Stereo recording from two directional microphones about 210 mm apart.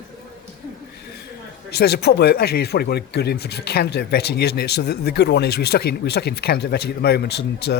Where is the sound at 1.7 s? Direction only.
50° left (ahead or behind).